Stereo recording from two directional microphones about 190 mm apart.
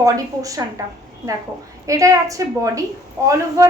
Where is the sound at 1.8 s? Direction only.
15° right (ahead or behind).